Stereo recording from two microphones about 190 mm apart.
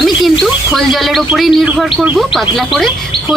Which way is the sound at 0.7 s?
Centre (ahead or behind).